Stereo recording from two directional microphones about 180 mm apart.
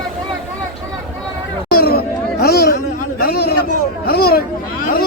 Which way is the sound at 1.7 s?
60° left (ahead or behind).